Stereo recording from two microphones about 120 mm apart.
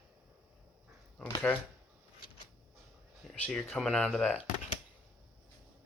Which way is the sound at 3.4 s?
5° left (ahead or behind).